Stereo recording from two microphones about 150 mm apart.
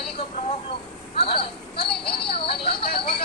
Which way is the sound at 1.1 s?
35° left (ahead or behind).